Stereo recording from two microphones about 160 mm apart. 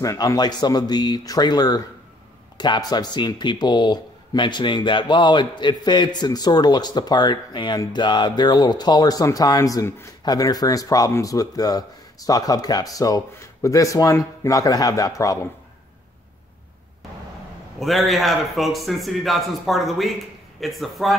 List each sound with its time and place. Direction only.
0.0 s speech: 20° left (ahead or behind)
17.7 s a man's voice: centre (ahead or behind)